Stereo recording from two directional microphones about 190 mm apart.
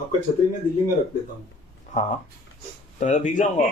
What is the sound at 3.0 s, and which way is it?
Speech, 40° left (ahead or behind).